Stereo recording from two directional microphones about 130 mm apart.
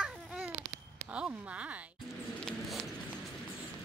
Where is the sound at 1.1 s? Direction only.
10° right (ahead or behind).